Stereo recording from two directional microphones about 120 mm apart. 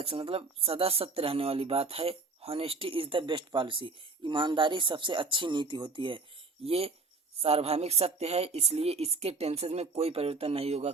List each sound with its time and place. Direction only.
0.0 s speech: 50° right (ahead or behind)
6.7 s speech: 55° right (ahead or behind)